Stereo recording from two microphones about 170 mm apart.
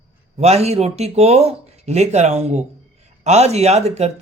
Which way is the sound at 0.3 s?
40° right (ahead or behind).